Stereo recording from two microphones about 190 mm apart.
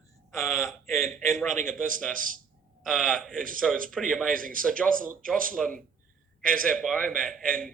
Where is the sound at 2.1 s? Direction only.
45° right (ahead or behind).